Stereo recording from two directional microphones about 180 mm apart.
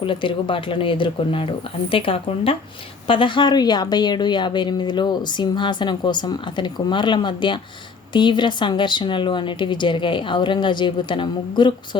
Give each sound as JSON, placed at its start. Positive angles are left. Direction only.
{"t": 0.0, "sound": "a woman's voice", "side_deg": 25}